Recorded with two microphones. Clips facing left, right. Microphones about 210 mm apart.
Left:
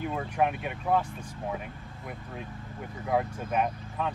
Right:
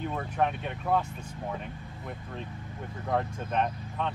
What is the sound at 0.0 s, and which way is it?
Speech, 10° left (ahead or behind).